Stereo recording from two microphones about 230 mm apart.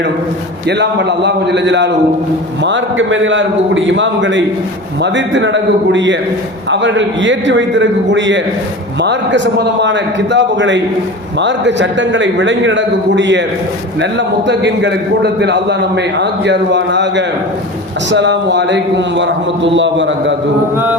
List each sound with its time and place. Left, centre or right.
0.7 s a man's voice: right